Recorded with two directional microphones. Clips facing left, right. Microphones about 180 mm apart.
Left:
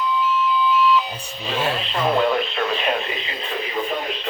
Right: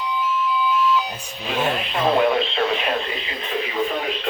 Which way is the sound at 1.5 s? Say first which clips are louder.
Right 1 dB; 10° right (ahead or behind).